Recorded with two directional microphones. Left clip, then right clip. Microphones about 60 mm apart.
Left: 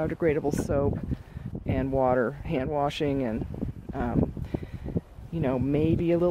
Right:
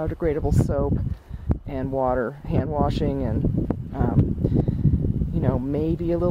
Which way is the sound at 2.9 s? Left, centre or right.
Centre.